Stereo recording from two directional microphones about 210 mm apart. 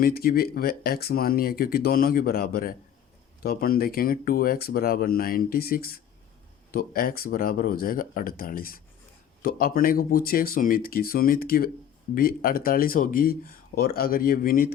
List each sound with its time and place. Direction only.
0.0 s speech: 45° left (ahead or behind)